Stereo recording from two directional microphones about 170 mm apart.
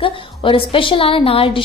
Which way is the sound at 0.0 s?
30° left (ahead or behind).